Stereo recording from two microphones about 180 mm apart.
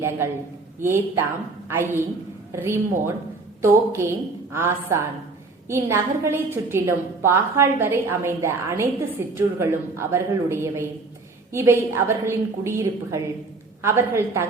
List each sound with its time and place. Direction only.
0.8 s a woman's voice: 15° right (ahead or behind)